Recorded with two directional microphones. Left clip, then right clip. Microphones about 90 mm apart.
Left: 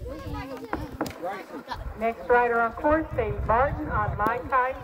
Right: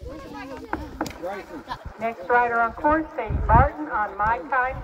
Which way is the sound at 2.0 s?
65° left (ahead or behind).